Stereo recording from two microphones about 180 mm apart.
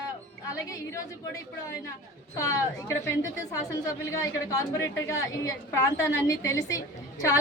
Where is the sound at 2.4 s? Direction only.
15° left (ahead or behind).